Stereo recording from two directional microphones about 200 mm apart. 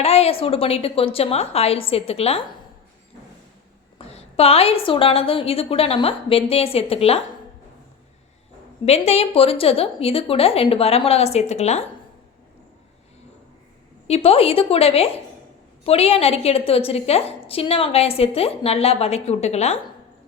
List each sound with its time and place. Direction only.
0.0 s a woman's voice: 30° left (ahead or behind)
3.9 s a woman's voice: 30° left (ahead or behind)
8.8 s a woman's voice: 30° left (ahead or behind)
14.1 s a woman's voice: 30° left (ahead or behind)